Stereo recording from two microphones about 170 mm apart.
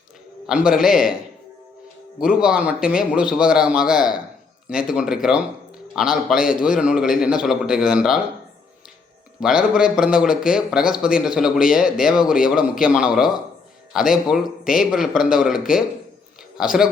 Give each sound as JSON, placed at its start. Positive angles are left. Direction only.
{"t": 0.4, "sound": "speech", "side_deg": -5}
{"t": 2.2, "sound": "speech", "side_deg": -5}
{"t": 9.4, "sound": "speech", "side_deg": -5}